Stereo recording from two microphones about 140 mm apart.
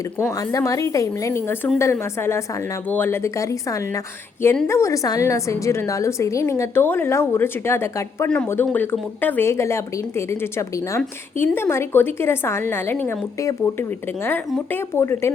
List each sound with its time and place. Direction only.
0.3 s a woman's voice: 25° left (ahead or behind)